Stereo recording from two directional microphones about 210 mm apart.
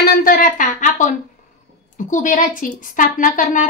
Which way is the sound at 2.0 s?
35° left (ahead or behind).